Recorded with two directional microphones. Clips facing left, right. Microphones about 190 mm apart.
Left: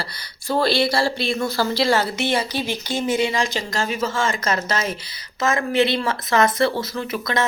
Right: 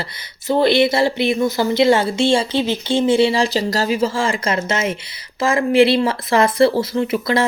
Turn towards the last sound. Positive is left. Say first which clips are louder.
# right 6 dB
turn(degrees=-30)  # may be behind; listen again after turning